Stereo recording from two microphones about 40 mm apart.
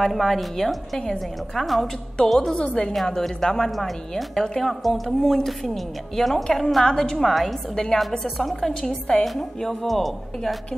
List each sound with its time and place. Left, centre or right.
0.0 s a woman's voice: centre
2.5 s a woman's voice: left
3.2 s a woman's voice: centre
7.2 s a woman's voice: centre
7.7 s a woman's voice: centre